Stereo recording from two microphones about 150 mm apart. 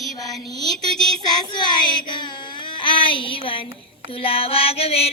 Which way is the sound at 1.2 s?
30° left (ahead or behind).